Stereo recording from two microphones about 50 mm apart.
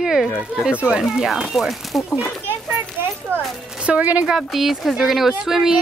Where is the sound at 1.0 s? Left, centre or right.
Centre.